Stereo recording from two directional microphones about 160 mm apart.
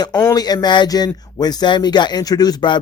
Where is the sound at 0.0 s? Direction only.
20° left (ahead or behind).